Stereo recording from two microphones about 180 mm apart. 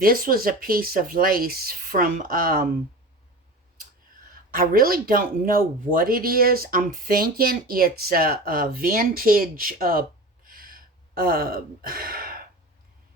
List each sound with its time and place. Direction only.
0.0 s speech: 55° right (ahead or behind)
4.5 s speech: 50° right (ahead or behind)